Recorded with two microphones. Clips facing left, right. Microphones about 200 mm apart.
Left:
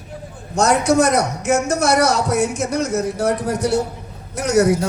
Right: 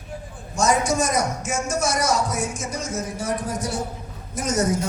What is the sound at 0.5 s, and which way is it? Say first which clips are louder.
A man's voice: left 6 dB; 65° left (ahead or behind).